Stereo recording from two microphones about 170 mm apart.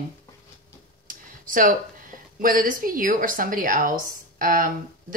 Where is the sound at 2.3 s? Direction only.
55° right (ahead or behind).